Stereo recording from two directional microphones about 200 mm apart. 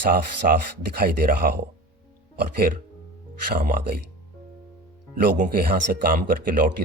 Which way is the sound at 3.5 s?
45° right (ahead or behind).